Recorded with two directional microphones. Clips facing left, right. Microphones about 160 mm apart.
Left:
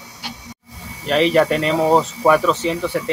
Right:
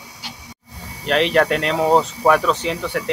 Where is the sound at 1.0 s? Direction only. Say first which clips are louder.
Left 2 dB; 5° left (ahead or behind).